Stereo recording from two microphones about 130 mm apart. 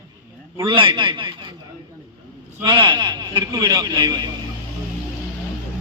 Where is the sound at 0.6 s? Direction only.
40° right (ahead or behind).